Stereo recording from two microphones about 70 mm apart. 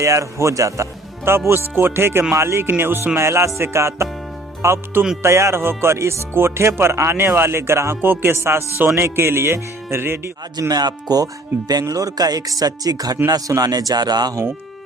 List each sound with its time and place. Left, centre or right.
0.0 s speech: right
1.5 s speech: right
10.7 s speech: right